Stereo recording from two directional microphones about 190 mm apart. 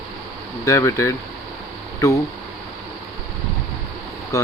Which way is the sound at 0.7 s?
15° left (ahead or behind).